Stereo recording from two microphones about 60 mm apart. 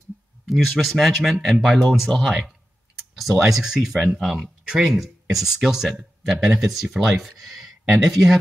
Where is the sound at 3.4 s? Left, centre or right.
Centre.